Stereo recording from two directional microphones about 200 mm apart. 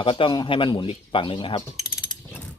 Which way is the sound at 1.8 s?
10° left (ahead or behind).